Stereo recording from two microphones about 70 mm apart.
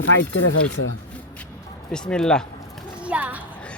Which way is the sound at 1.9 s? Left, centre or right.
Centre.